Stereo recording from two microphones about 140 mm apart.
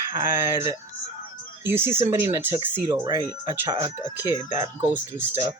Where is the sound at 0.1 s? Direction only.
25° right (ahead or behind).